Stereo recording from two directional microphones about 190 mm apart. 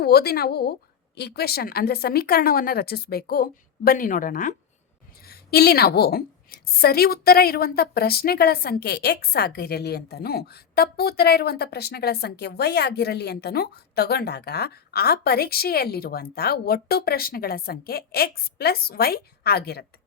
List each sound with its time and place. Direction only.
0.0 s a woman's voice: 55° left (ahead or behind)